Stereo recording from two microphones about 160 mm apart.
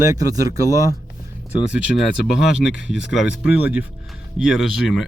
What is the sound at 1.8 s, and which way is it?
A man's voice, 5° right (ahead or behind).